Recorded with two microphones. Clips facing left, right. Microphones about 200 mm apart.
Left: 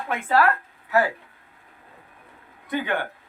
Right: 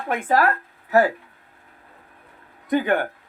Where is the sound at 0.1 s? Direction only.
45° right (ahead or behind).